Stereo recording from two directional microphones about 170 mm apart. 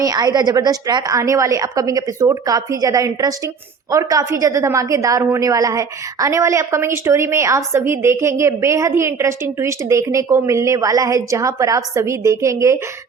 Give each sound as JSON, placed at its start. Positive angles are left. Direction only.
{"t": 0.0, "sound": "a woman's voice", "side_deg": -25}